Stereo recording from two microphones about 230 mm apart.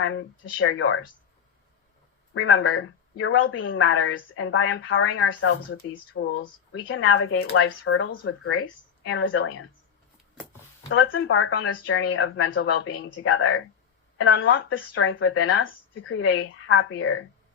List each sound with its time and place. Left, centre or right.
0.0 s a woman's voice: left
2.3 s a woman's voice: left
6.2 s a woman's voice: left
10.8 s a woman's voice: left